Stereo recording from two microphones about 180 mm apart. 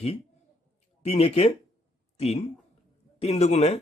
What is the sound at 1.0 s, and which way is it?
Speech, 35° left (ahead or behind).